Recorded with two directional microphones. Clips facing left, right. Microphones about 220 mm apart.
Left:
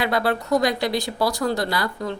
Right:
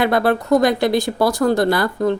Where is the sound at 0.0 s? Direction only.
50° right (ahead or behind).